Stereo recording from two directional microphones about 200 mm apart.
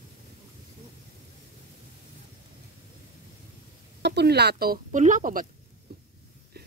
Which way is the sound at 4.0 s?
55° right (ahead or behind).